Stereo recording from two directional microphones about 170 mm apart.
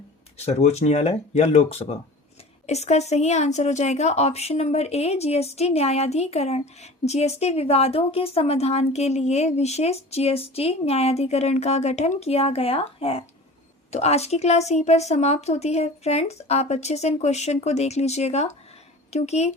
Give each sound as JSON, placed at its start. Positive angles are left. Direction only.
{"t": 0.3, "sound": "speech", "side_deg": 40}